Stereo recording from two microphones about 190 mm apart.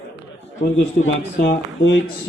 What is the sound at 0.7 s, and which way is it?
A man's voice, 70° left (ahead or behind).